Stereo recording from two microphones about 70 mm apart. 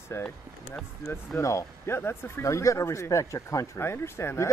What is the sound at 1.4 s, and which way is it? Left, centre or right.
Speech, left.